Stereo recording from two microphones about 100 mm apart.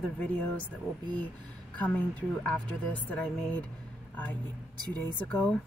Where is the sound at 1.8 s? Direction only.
15° left (ahead or behind).